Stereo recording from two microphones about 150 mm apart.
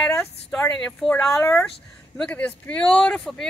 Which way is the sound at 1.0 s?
Centre (ahead or behind).